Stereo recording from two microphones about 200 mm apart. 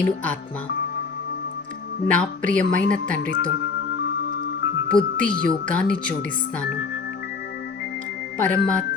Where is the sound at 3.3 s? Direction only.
65° left (ahead or behind).